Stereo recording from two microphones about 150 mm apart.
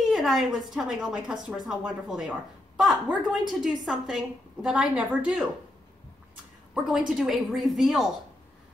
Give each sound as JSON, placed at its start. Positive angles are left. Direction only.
{"t": 0.1, "sound": "a woman's voice", "side_deg": 0}
{"t": 6.7, "sound": "a woman's voice", "side_deg": -5}